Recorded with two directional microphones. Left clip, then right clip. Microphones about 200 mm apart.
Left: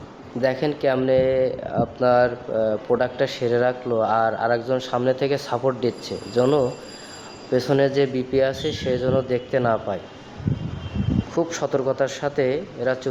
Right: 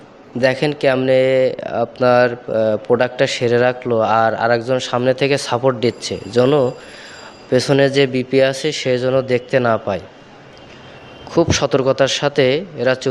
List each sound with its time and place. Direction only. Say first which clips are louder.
0.4 s speech: right 6 dB; 35° right (ahead or behind)
11.3 s speech: right 8 dB; 35° right (ahead or behind)